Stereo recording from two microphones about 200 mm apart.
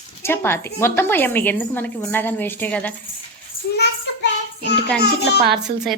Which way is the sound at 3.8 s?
60° left (ahead or behind).